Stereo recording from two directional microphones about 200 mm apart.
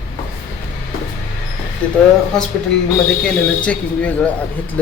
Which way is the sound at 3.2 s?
5° left (ahead or behind).